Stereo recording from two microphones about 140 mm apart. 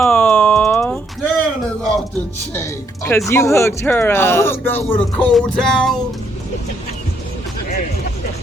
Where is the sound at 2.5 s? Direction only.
20° left (ahead or behind).